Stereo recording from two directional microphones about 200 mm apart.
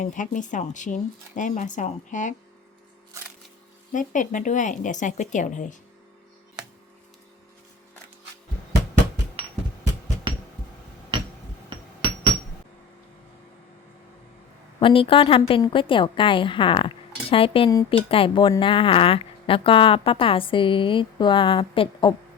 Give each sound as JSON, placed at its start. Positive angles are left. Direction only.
{"t": 0.0, "sound": "speech", "side_deg": 40}
{"t": 3.9, "sound": "speech", "side_deg": 40}
{"t": 14.8, "sound": "a woman's voice", "side_deg": 25}